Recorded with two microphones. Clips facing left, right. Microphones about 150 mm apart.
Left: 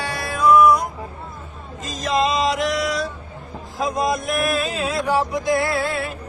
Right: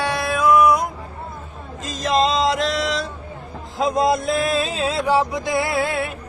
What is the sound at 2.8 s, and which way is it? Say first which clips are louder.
Vehicle: even; 25° right (ahead or behind).